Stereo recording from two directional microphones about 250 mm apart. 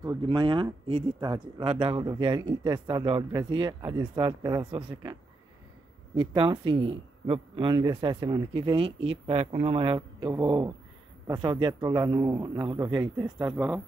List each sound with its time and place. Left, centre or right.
0.3 s speech: centre
6.1 s a man's voice: centre